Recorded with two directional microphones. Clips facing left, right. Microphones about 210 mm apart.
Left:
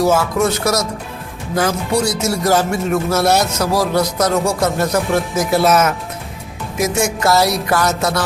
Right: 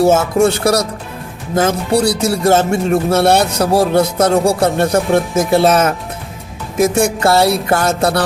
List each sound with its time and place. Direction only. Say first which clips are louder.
0.0 s speech: right 4 dB; 25° right (ahead or behind)